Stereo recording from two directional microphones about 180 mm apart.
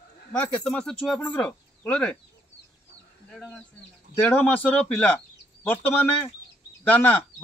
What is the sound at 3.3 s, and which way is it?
A man's voice, centre (ahead or behind).